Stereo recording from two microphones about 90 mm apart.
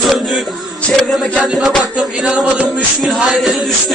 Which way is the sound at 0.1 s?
Centre (ahead or behind).